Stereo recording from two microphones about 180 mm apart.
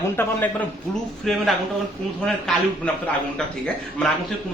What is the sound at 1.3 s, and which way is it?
Speech, centre (ahead or behind).